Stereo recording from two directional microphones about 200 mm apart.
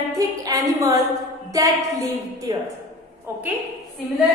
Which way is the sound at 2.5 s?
20° right (ahead or behind).